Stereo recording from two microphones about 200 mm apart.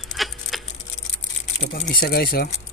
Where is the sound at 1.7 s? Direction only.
50° left (ahead or behind).